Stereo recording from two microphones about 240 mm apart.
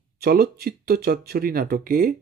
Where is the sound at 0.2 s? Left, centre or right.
Right.